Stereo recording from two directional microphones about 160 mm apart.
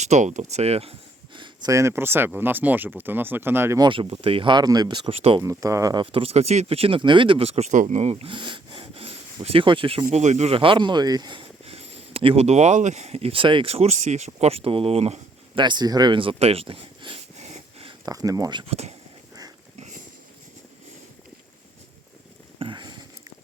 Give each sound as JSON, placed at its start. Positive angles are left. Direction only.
{"t": 0.0, "sound": "speech", "side_deg": -45}
{"t": 1.7, "sound": "speech", "side_deg": -15}
{"t": 3.8, "sound": "speech", "side_deg": -35}
{"t": 5.4, "sound": "speech", "side_deg": -20}
{"t": 10.1, "sound": "speech", "side_deg": -45}
{"t": 18.0, "sound": "speech", "side_deg": -20}
{"t": 18.7, "sound": "speech", "side_deg": -40}
{"t": 22.5, "sound": "a sound", "side_deg": -30}